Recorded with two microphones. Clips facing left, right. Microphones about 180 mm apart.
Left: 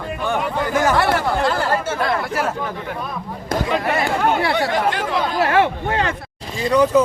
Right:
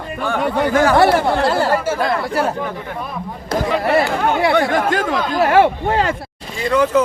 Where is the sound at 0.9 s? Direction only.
40° right (ahead or behind).